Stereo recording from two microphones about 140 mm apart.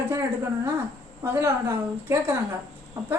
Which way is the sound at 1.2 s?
20° right (ahead or behind).